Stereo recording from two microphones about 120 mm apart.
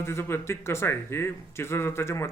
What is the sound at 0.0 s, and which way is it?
Speech, 20° left (ahead or behind).